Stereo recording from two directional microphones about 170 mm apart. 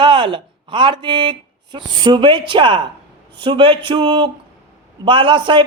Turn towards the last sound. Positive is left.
turn(degrees=-30)  # may be behind; listen again after turning